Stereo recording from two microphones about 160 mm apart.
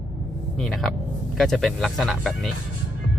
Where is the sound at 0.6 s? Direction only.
Centre (ahead or behind).